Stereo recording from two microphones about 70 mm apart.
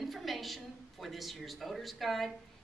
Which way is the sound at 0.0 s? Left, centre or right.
Centre.